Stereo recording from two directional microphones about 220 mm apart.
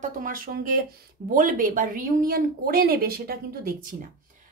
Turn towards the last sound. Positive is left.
turn(degrees=-40)  # may be behind; listen again after turning